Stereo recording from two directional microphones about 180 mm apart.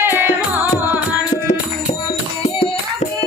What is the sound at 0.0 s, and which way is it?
Music, 10° right (ahead or behind).